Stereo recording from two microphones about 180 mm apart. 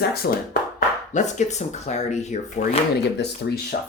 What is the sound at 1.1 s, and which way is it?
Speech, 40° left (ahead or behind).